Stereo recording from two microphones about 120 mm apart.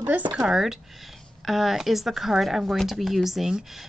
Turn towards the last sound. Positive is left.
turn(degrees=-5)  # may be behind; listen again after turning